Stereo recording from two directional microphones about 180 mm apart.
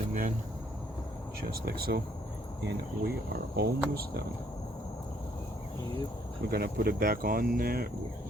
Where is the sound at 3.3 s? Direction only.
60° right (ahead or behind).